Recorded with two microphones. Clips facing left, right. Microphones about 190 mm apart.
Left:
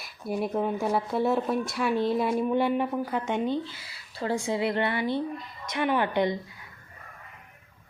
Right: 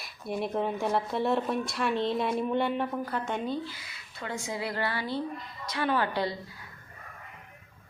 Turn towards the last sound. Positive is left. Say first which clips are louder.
# left 3 dB
turn(degrees=20)  # may be behind; listen again after turning